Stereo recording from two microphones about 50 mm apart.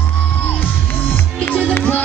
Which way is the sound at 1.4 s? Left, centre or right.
Left.